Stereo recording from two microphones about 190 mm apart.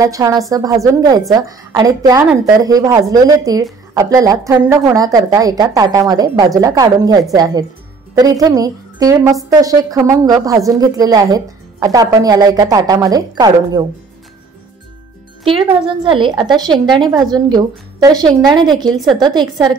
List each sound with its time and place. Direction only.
0.0 s a woman's voice: 20° right (ahead or behind)
15.4 s a woman's voice: 30° right (ahead or behind)